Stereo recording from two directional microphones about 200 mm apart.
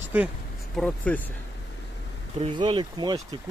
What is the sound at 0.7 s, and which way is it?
Speech, 5° left (ahead or behind).